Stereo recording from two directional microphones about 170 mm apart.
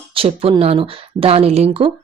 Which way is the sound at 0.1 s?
30° right (ahead or behind).